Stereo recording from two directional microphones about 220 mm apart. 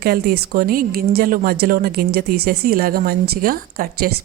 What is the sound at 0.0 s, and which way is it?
Speech, 45° right (ahead or behind).